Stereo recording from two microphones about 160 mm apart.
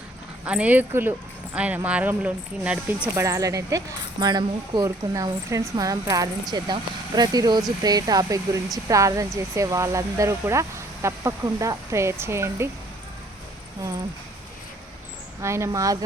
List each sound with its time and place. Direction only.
0.4 s speech: 10° right (ahead or behind)
3.2 s speech: 20° right (ahead or behind)
15.4 s speech: 15° right (ahead or behind)